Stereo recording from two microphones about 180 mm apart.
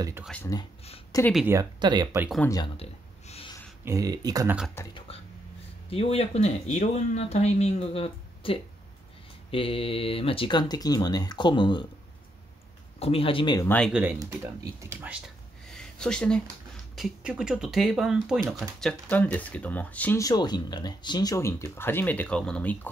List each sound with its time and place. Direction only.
0.2 s speech: 5° left (ahead or behind)
1.1 s speech: 20° left (ahead or behind)
1.5 s speech: 20° right (ahead or behind)
2.4 s speech: 20° left (ahead or behind)
2.8 s a sound: 35° left (ahead or behind)
3.8 s speech: 20° right (ahead or behind)
4.8 s speech: 15° left (ahead or behind)
5.9 s speech: 35° left (ahead or behind)
13.0 s speech: 30° left (ahead or behind)
13.7 s speech: 5° left (ahead or behind)
14.2 s speech: 20° right (ahead or behind); by 22.8 s 5° left (ahead or behind)